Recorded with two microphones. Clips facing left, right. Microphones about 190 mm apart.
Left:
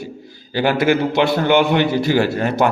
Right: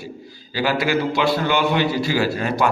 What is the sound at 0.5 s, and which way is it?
Speech, 55° left (ahead or behind).